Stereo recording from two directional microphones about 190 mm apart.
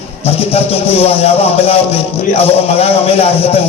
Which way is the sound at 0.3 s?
30° left (ahead or behind).